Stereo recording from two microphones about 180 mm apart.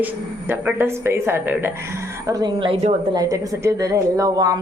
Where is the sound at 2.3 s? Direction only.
25° right (ahead or behind).